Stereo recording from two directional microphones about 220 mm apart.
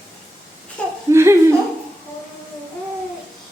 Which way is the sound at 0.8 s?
5° left (ahead or behind).